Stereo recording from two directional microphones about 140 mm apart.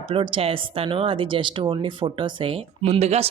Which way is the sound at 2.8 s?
50° right (ahead or behind).